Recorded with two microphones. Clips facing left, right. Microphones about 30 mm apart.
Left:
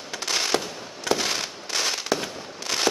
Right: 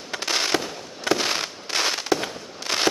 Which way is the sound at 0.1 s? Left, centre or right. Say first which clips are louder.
Right 1 dB; centre.